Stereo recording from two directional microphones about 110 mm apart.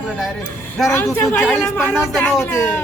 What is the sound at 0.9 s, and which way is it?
Speech, 25° left (ahead or behind).